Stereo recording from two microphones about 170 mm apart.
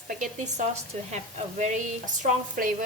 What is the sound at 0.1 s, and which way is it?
A woman's voice, 50° right (ahead or behind).